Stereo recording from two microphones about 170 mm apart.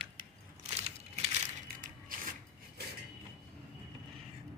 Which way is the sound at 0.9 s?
40° right (ahead or behind).